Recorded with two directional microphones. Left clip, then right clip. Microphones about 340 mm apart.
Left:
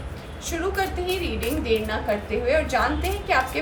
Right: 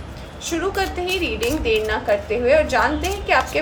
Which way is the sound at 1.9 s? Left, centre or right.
Right.